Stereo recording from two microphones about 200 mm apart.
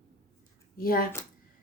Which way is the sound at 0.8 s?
45° left (ahead or behind).